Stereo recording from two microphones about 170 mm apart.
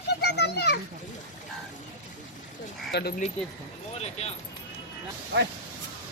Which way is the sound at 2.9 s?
75° left (ahead or behind).